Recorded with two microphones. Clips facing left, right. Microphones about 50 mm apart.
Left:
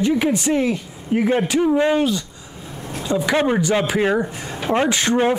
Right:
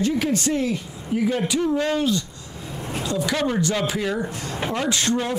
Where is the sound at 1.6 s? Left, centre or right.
Centre.